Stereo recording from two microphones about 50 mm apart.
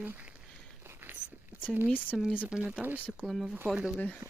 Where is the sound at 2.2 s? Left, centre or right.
Right.